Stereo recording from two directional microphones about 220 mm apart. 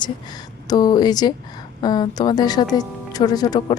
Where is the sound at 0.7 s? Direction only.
20° left (ahead or behind).